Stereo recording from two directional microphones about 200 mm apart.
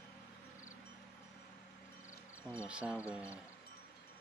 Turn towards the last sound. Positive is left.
turn(degrees=-5)  # may be behind; listen again after turning